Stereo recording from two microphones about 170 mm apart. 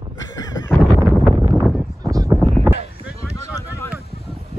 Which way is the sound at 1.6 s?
Centre (ahead or behind).